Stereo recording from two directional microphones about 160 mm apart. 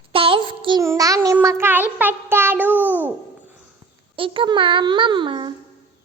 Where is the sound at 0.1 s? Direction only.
35° right (ahead or behind).